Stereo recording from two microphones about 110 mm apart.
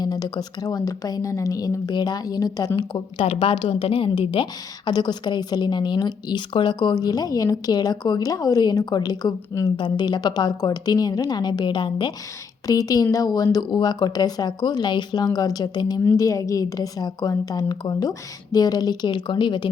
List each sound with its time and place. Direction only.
0.0 s a woman's voice: 35° left (ahead or behind)
3.2 s a woman's voice: 55° left (ahead or behind); by 9.7 s 35° left (ahead or behind)
9.7 s a woman's voice: 45° left (ahead or behind)
12.6 s a woman's voice: 35° left (ahead or behind)
16.0 s a woman's voice: 30° left (ahead or behind); by 19.6 s 45° left (ahead or behind)